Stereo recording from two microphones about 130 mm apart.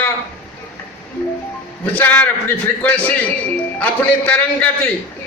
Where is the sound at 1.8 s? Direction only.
15° left (ahead or behind).